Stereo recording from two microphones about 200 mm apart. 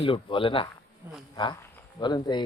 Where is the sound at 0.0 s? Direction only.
25° left (ahead or behind).